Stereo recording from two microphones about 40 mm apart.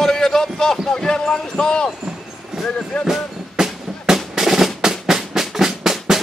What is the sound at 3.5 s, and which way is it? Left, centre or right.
Music, centre.